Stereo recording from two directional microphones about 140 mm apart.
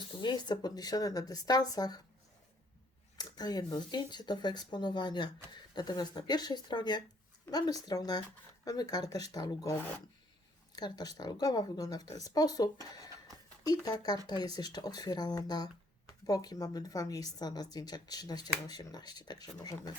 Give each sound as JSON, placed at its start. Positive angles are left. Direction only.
{"t": 0.2, "sound": "speech", "side_deg": 30}
{"t": 3.2, "sound": "speech", "side_deg": 30}